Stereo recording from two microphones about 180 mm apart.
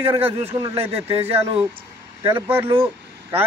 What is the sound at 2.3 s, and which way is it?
Speech, 15° right (ahead or behind).